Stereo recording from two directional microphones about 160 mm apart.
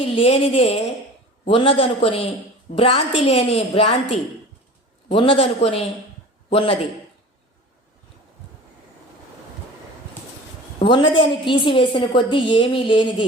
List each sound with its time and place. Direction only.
0.2 s a woman's voice: 40° left (ahead or behind)
10.8 s a woman's voice: 30° left (ahead or behind)